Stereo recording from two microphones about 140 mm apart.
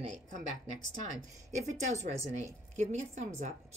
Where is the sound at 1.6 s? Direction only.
55° right (ahead or behind).